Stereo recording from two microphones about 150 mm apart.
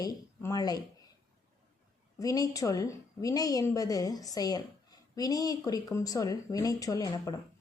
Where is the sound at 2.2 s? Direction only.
25° left (ahead or behind).